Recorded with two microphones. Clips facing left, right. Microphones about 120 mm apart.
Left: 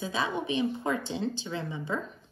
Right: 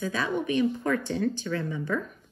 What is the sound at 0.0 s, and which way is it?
A woman's voice, 15° left (ahead or behind).